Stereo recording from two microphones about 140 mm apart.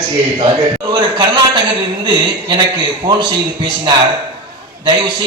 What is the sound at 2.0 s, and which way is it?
A man's voice, 30° right (ahead or behind).